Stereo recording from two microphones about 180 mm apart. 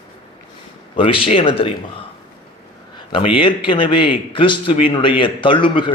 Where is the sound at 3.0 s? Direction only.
30° left (ahead or behind).